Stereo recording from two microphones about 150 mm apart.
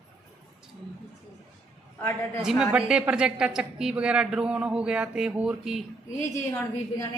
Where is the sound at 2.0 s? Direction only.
15° left (ahead or behind).